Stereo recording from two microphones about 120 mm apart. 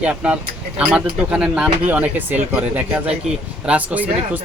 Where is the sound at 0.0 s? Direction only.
10° right (ahead or behind).